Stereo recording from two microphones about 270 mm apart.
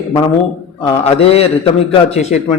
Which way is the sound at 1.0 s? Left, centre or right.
Left.